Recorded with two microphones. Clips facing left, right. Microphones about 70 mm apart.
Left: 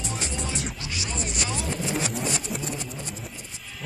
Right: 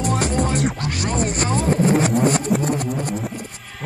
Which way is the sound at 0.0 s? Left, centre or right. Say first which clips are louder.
Right 12 dB; right.